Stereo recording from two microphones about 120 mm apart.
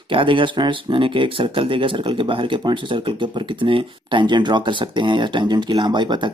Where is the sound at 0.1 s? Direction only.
45° right (ahead or behind).